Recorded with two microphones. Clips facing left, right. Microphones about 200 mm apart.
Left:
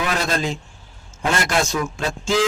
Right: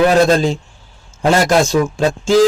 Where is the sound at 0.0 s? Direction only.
35° right (ahead or behind).